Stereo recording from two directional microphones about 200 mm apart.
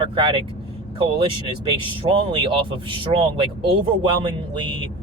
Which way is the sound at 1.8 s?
25° right (ahead or behind).